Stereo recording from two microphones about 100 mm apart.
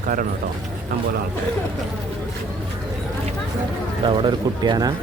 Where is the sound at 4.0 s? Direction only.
55° right (ahead or behind).